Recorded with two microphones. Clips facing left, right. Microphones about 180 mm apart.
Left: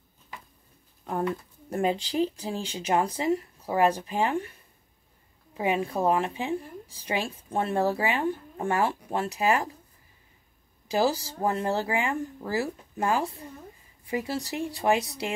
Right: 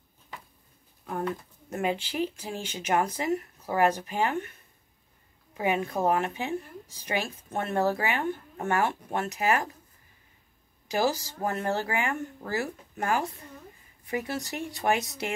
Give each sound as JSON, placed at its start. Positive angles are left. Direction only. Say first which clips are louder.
{"t": 1.7, "sound": "speech", "louder": "left 3 dB", "side_deg": 35}
{"t": 5.6, "sound": "a woman's voice", "louder": "left 1 dB", "side_deg": 30}
{"t": 10.9, "sound": "a woman's voice", "louder": "left 2 dB", "side_deg": 30}